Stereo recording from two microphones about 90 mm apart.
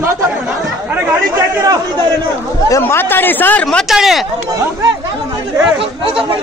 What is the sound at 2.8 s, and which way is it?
Speech, 25° left (ahead or behind).